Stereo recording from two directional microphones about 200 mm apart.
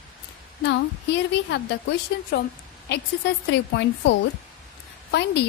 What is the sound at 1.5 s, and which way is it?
A woman's voice, 60° left (ahead or behind).